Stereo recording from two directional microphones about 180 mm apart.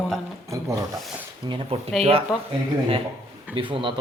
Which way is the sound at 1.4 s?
30° right (ahead or behind).